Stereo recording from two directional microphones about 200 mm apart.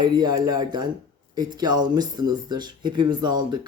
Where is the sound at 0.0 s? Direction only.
20° right (ahead or behind).